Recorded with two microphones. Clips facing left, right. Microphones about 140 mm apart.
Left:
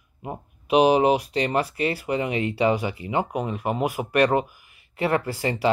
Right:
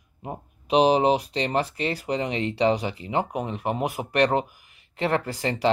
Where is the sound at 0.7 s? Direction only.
35° right (ahead or behind).